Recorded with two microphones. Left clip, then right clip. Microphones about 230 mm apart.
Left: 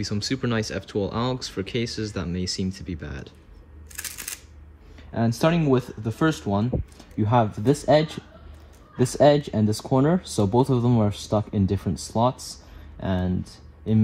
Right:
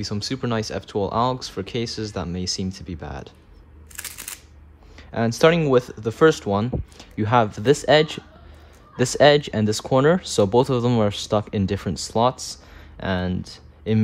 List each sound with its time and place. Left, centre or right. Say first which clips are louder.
0.0 s speech: even; centre
5.5 s speech: right 5 dB; left